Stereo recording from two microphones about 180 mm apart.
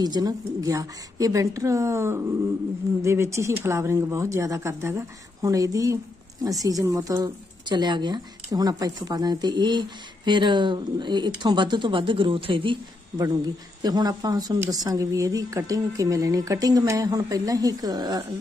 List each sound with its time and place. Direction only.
0.0 s speech: 20° right (ahead or behind)
13.8 s speech: 20° right (ahead or behind)